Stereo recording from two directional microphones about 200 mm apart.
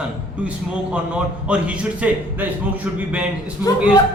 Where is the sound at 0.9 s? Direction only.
5° right (ahead or behind).